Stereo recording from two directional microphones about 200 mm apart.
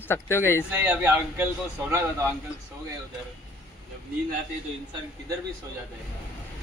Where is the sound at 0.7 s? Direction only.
10° right (ahead or behind).